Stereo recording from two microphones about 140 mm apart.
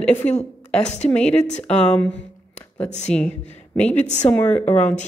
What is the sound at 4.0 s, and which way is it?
Speech, 55° left (ahead or behind).